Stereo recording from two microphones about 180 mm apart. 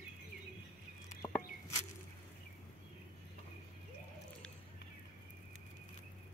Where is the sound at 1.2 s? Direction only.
15° left (ahead or behind).